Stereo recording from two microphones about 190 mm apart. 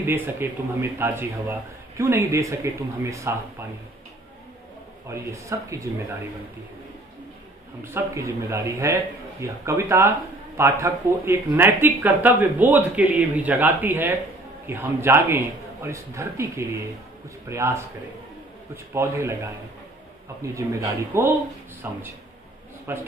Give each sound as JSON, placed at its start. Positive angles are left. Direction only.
{"t": 0.0, "sound": "speech", "side_deg": -10}
{"t": 5.1, "sound": "speech", "side_deg": -15}
{"t": 7.8, "sound": "speech", "side_deg": -15}
{"t": 18.9, "sound": "speech", "side_deg": -15}
{"t": 20.5, "sound": "speech", "side_deg": -15}